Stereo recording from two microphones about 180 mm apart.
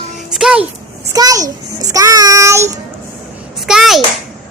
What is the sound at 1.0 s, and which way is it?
A child's voice, 20° right (ahead or behind).